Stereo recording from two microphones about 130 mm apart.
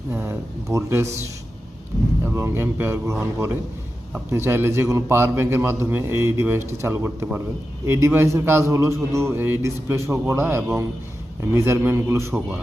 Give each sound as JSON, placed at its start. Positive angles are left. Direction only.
{"t": 0.1, "sound": "a man's voice", "side_deg": -15}
{"t": 2.2, "sound": "a man's voice", "side_deg": -20}